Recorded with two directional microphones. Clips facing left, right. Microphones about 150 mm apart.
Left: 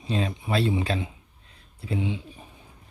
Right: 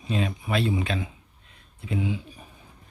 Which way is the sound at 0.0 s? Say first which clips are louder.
Even; 30° left (ahead or behind).